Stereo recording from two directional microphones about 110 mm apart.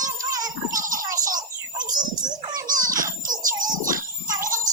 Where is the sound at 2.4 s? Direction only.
35° right (ahead or behind).